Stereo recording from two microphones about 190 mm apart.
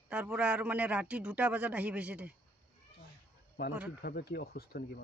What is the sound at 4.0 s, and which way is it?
Speech, 55° left (ahead or behind).